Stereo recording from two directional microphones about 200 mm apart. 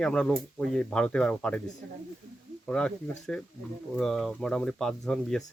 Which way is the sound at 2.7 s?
5° left (ahead or behind).